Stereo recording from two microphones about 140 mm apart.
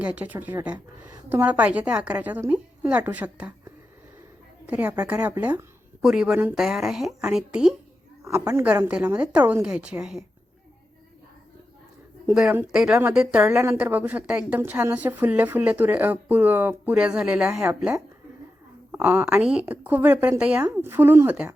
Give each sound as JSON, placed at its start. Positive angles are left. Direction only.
{"t": 0.0, "sound": "a woman's voice", "side_deg": -10}
{"t": 4.6, "sound": "a woman's voice", "side_deg": -10}
{"t": 6.0, "sound": "a woman's voice", "side_deg": -5}
{"t": 8.2, "sound": "a woman's voice", "side_deg": -20}
{"t": 12.2, "sound": "a woman's voice", "side_deg": -10}